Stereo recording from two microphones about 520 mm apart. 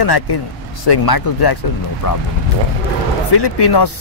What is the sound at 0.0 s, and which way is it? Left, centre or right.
Speech, left.